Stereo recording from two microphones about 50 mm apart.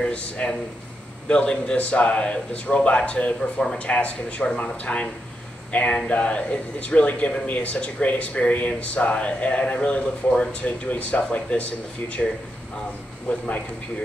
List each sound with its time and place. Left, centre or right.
0.1 s speech: left
13.3 s a man's voice: left